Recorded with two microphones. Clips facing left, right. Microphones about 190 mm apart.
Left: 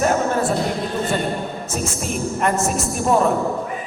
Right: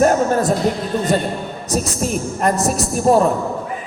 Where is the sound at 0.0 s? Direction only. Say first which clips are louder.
Right 4 dB; 40° right (ahead or behind).